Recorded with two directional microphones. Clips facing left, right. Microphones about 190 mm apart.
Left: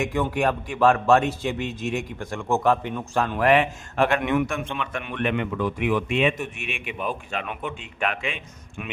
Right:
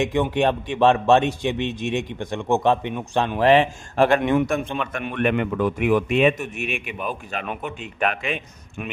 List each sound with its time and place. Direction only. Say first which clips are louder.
0.0 s a man's voice: right 3 dB; 20° right (ahead or behind); by 8.4 s 45° right (ahead or behind)